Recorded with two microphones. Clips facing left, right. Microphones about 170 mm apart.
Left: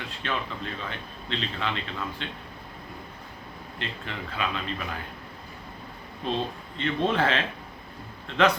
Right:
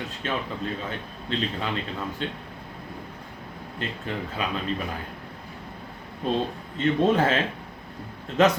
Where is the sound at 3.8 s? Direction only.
40° right (ahead or behind).